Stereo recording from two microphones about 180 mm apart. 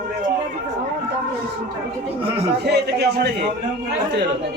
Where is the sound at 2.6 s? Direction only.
65° right (ahead or behind).